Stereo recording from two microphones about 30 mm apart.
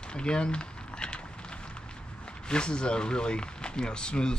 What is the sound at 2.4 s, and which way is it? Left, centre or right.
Speech, left.